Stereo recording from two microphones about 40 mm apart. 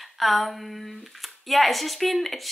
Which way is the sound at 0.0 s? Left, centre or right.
Centre.